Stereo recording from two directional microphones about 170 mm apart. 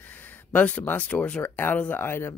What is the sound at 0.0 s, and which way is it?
Speech, 10° left (ahead or behind).